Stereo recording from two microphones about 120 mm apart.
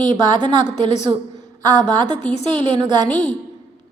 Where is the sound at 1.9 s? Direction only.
90° left.